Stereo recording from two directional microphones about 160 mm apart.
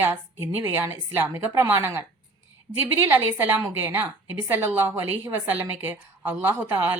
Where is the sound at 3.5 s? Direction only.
10° right (ahead or behind).